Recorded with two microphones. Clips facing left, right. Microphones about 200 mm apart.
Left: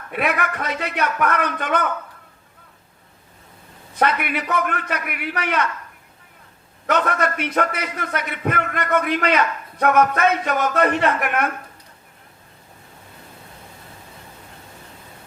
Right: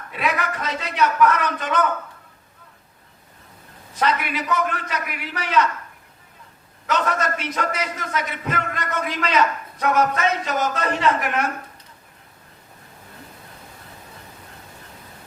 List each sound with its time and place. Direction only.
0.1 s a man's voice: 60° left (ahead or behind)
3.9 s a man's voice: 60° left (ahead or behind)
6.8 s a man's voice: 60° left (ahead or behind)